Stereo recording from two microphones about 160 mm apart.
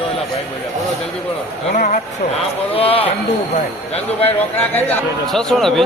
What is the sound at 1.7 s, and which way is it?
Speech, 55° left (ahead or behind).